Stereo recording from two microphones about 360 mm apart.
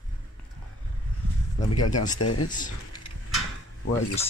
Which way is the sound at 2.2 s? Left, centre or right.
Left.